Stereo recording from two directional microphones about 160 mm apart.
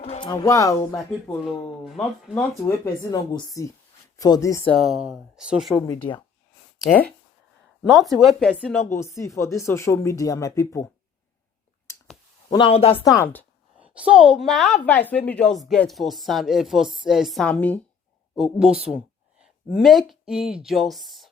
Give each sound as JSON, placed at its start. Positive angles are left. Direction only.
{"t": 0.0, "sound": "speech", "side_deg": 35}
{"t": 1.5, "sound": "a woman's voice", "side_deg": 5}
{"t": 2.6, "sound": "speech", "side_deg": 20}
{"t": 4.7, "sound": "a woman's voice", "side_deg": 0}
{"t": 5.8, "sound": "speech", "side_deg": 25}
{"t": 7.9, "sound": "a woman's voice", "side_deg": 0}
{"t": 8.8, "sound": "speech", "side_deg": 15}
{"t": 12.5, "sound": "speech", "side_deg": 30}
{"t": 13.1, "sound": "speech", "side_deg": 15}
{"t": 13.7, "sound": "a sound", "side_deg": -10}
{"t": 14.1, "sound": "a woman's voice", "side_deg": -5}
{"t": 18.9, "sound": "speech", "side_deg": -5}